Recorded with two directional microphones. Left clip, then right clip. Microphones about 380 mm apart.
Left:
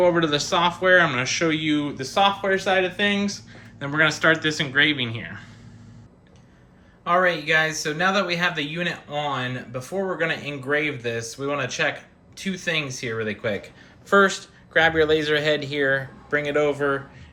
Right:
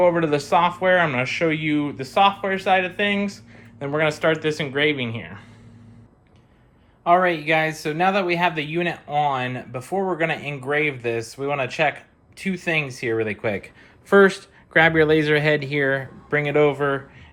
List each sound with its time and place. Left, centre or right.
0.0 s speech: centre
7.0 s speech: centre